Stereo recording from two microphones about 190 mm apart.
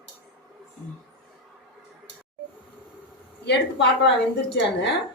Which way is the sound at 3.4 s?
65° left (ahead or behind).